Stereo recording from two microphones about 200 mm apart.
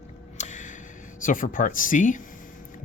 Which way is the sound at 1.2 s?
40° left (ahead or behind).